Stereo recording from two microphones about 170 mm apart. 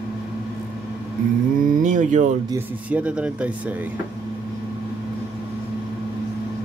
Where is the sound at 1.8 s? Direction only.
45° right (ahead or behind).